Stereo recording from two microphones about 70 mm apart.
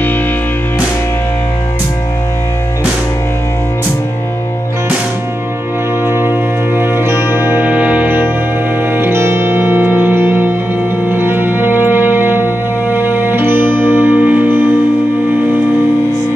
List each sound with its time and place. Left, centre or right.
6.0 s music: right
7.6 s music: right